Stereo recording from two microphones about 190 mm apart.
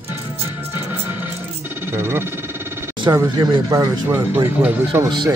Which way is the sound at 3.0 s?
20° right (ahead or behind).